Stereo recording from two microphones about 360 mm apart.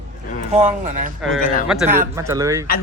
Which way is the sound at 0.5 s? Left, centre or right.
Centre.